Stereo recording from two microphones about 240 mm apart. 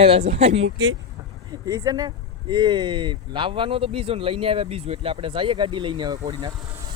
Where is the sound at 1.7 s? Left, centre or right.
Centre.